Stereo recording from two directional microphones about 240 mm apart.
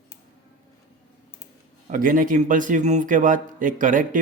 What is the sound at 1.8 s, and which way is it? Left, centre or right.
A man's voice, right.